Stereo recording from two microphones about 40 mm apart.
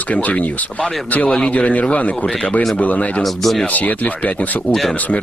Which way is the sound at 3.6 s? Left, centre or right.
Left.